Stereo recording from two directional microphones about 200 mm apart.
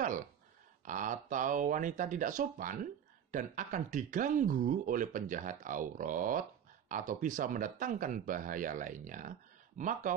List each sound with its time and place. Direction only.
0.8 s speech: 40° right (ahead or behind)